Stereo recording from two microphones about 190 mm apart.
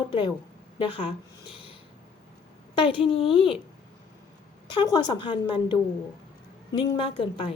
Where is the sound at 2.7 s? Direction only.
30° left (ahead or behind).